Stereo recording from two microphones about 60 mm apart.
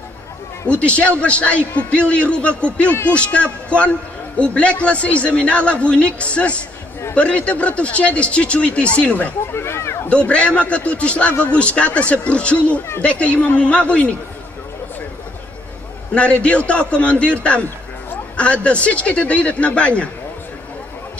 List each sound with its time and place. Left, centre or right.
0.7 s a man's voice: left
9.5 s a sound: left
10.0 s a man's voice: left
16.2 s a man's voice: left